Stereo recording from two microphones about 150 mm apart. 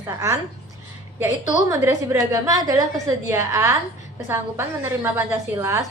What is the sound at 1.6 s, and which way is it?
A woman's voice, 20° right (ahead or behind).